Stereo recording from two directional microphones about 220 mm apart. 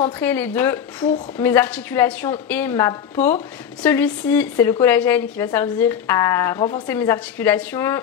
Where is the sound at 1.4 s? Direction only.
10° left (ahead or behind).